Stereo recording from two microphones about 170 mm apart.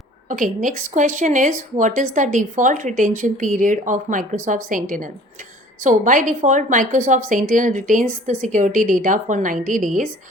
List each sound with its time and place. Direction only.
0.3 s speech: 50° right (ahead or behind)